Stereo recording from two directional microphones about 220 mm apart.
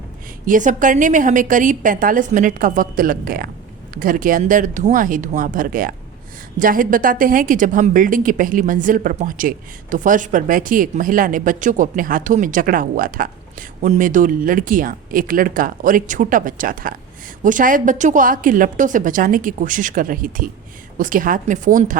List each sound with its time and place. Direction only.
0.4 s a woman's voice: 35° right (ahead or behind)